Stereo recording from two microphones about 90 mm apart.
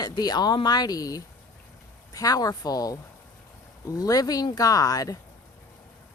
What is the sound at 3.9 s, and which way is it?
Speech, 40° left (ahead or behind).